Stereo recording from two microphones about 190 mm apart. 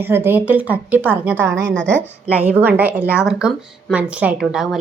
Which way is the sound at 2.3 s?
10° right (ahead or behind).